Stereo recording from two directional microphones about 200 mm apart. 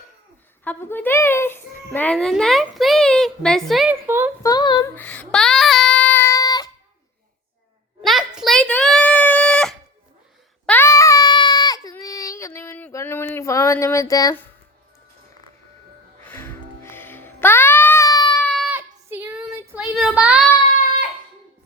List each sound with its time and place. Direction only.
0.6 s a child's voice: 10° left (ahead or behind)
4.0 s speech: 10° right (ahead or behind)
4.4 s female singing: 20° left (ahead or behind)
4.9 s child singing: 5° left (ahead or behind)
8.4 s a sound: centre (ahead or behind); by 14.4 s 20° left (ahead or behind)
16.2 s music: 10° left (ahead or behind)
18.3 s a sound: 5° left (ahead or behind)
18.7 s child singing: 10° right (ahead or behind)